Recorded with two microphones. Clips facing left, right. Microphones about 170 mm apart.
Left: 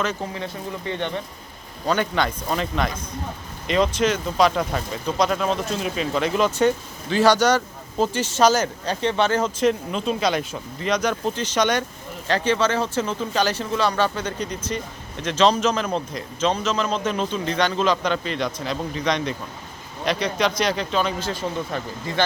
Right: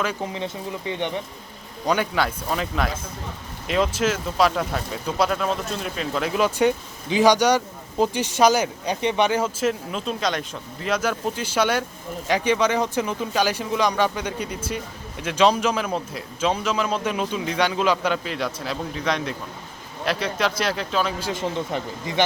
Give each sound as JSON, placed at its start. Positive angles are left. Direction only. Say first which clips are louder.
{"t": 0.0, "sound": "a man's voice", "louder": "even", "side_deg": -10}